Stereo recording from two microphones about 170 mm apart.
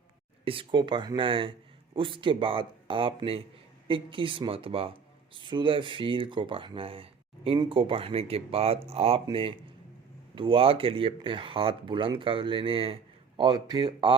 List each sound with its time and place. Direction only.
0.4 s speech: 30° right (ahead or behind)